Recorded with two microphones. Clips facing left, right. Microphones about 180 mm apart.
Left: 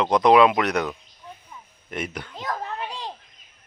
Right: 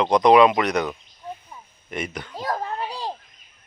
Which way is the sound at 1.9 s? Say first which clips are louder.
Right 1 dB; 5° left (ahead or behind).